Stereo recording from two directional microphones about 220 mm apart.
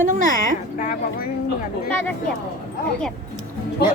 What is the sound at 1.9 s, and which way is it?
Speech, 5° left (ahead or behind).